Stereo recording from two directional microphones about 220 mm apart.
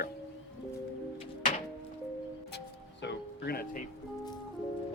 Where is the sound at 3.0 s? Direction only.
50° left (ahead or behind).